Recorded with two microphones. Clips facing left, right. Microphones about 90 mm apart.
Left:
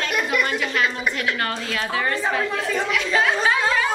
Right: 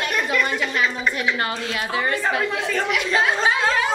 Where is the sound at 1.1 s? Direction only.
10° right (ahead or behind).